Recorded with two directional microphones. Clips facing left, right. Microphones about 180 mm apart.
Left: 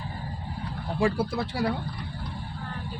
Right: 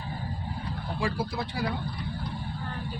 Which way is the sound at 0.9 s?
55° left (ahead or behind).